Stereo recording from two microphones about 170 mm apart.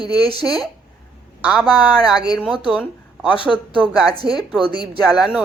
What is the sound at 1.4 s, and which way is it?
A woman's voice, 5° right (ahead or behind).